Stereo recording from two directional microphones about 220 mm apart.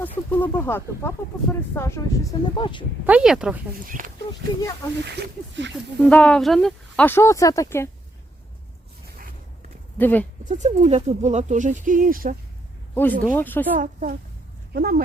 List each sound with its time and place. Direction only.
0.0 s speech: 10° left (ahead or behind)
3.1 s speech: 5° right (ahead or behind)
3.8 s speech: 40° right (ahead or behind)
5.0 s speech: 50° right (ahead or behind)
5.7 s speech: 5° left (ahead or behind)
10.0 s speech: 10° left (ahead or behind)
10.5 s speech: 35° right (ahead or behind)
12.9 s speech: 10° left (ahead or behind)
13.7 s speech: 35° right (ahead or behind)